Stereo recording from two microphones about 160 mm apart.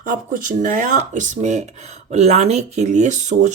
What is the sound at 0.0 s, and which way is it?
A woman's voice, 60° right (ahead or behind).